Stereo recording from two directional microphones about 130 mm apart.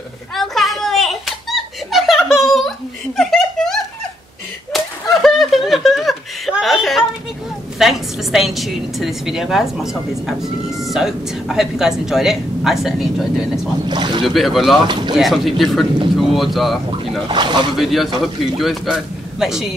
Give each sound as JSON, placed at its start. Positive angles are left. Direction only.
{"t": 0.4, "sound": "giggle", "side_deg": 0}
{"t": 4.7, "sound": "slap", "side_deg": 0}
{"t": 7.8, "sound": "a woman's voice", "side_deg": 0}
{"t": 13.8, "sound": "speech", "side_deg": -35}
{"t": 14.2, "sound": "a woman's voice", "side_deg": 0}
{"t": 14.9, "sound": "speech", "side_deg": -35}
{"t": 15.1, "sound": "a woman's voice", "side_deg": 0}
{"t": 17.3, "sound": "speech", "side_deg": -35}
{"t": 17.7, "sound": "a woman's voice", "side_deg": 0}